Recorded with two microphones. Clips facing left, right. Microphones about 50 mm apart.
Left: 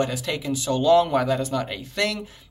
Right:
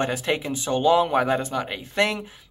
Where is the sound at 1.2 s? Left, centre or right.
Right.